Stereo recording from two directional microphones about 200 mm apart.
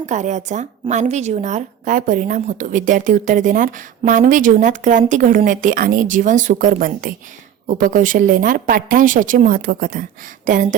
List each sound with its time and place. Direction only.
0.0 s a woman's voice: 35° right (ahead or behind)